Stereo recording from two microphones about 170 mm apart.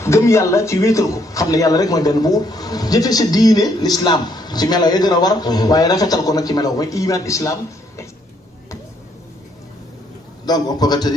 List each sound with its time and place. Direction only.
0.0 s a man's voice: 15° left (ahead or behind)
10.4 s a man's voice: 25° left (ahead or behind)